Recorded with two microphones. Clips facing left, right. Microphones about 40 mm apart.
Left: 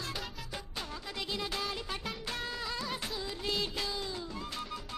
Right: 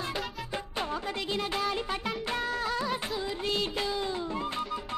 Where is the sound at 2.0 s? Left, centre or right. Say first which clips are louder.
Right 7 dB; centre.